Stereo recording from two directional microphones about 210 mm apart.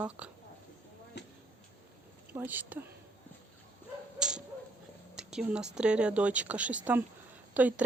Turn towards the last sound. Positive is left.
turn(degrees=-5)  # may be behind; listen again after turning